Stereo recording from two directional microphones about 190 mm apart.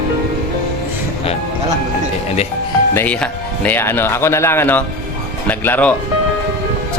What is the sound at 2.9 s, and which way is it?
Speech, 10° left (ahead or behind).